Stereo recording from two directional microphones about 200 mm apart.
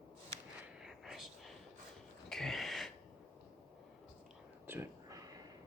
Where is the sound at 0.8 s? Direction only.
Centre (ahead or behind).